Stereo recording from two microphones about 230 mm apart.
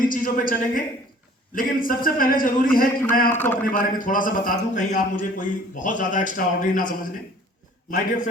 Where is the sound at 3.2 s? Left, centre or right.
Centre.